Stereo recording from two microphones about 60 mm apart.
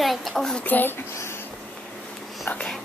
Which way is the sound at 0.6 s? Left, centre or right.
Left.